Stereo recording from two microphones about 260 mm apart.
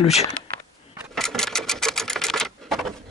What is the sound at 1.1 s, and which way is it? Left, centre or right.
Sewing machine, centre.